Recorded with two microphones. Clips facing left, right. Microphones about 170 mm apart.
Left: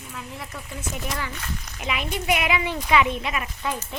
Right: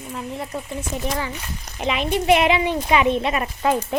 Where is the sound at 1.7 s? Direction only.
30° right (ahead or behind).